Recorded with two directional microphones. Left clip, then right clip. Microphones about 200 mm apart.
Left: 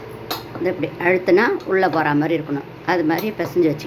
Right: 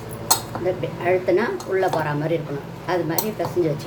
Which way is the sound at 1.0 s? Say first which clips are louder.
Left 5 dB; 40° left (ahead or behind).